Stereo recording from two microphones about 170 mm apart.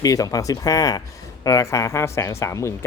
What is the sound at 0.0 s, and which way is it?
Speech, 20° left (ahead or behind).